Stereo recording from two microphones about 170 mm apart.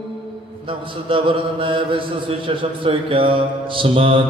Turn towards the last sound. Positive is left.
turn(degrees=-30)  # may be behind; listen again after turning